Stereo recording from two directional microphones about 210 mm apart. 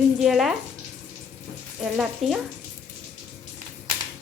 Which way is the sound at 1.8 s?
Centre (ahead or behind).